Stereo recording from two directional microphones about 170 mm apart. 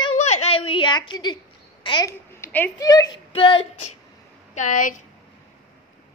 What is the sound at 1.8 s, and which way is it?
Speech, 25° left (ahead or behind).